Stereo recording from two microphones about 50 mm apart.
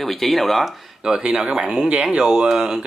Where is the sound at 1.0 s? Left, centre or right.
Centre.